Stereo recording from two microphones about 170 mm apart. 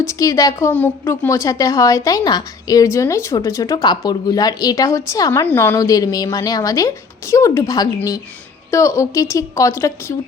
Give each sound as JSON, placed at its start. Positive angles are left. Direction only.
{"t": 0.0, "sound": "a woman's voice", "side_deg": 20}